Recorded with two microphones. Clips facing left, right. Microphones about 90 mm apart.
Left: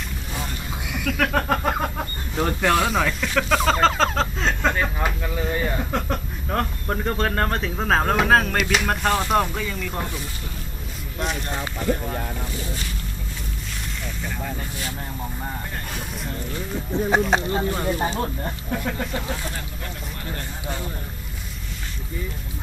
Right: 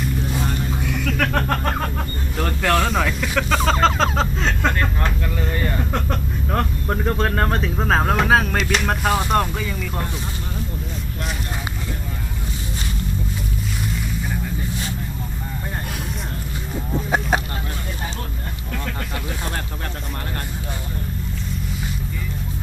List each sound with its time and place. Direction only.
0.9 s speech: 5° left (ahead or behind)
2.9 s speech: centre (ahead or behind)
16.9 s speech: 5° right (ahead or behind)
17.6 s speech: 35° left (ahead or behind)